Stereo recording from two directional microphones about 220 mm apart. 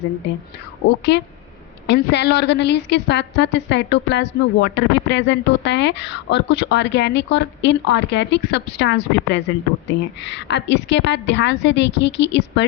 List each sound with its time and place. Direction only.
0.9 s a woman's voice: 50° left (ahead or behind)